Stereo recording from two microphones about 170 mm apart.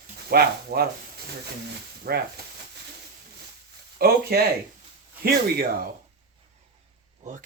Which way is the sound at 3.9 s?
65° right (ahead or behind).